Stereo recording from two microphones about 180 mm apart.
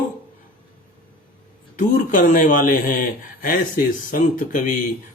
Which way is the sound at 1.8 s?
45° left (ahead or behind).